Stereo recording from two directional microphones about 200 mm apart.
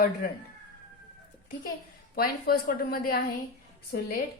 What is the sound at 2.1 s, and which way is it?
Speech, 50° left (ahead or behind).